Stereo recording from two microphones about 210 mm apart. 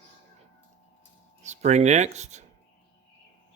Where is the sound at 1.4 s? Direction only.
35° right (ahead or behind).